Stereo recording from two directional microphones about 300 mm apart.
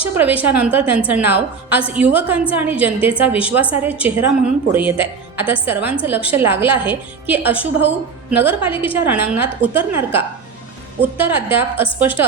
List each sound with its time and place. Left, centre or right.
0.0 s a woman's voice: centre